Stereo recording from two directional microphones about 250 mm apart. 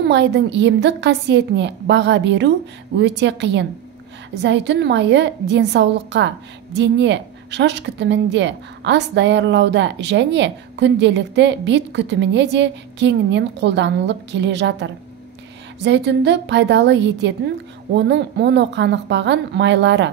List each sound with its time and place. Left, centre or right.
0.0 s a woman's voice: right